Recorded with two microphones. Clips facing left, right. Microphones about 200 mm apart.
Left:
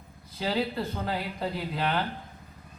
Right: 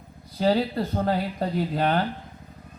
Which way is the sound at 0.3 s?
40° right (ahead or behind).